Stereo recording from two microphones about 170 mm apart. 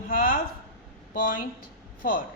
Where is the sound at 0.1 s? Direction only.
55° left (ahead or behind).